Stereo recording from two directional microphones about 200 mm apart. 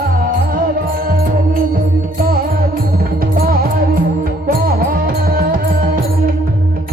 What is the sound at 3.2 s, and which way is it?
Music, 50° right (ahead or behind).